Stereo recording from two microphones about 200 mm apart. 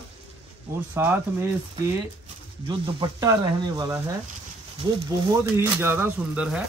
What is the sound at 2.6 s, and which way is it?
Speech, 20° right (ahead or behind).